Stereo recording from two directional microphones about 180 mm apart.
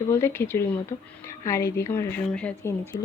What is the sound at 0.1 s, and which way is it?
Speech, 15° left (ahead or behind).